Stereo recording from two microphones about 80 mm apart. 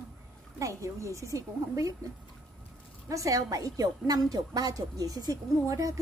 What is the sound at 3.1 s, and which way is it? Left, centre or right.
A woman's voice, right.